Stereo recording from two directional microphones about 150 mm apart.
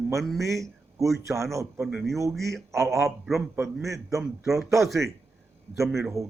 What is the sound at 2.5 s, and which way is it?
Speech, 20° right (ahead or behind).